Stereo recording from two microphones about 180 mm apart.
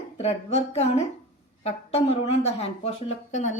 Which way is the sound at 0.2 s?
35° left (ahead or behind).